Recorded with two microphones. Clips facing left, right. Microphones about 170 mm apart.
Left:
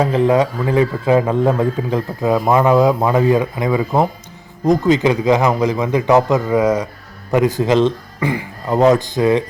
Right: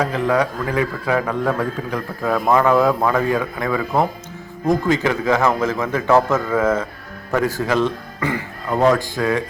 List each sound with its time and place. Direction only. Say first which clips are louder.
0.0 s a man's voice: left 5 dB; 25° left (ahead or behind)